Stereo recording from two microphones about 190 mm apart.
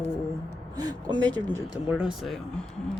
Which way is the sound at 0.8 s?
20° right (ahead or behind).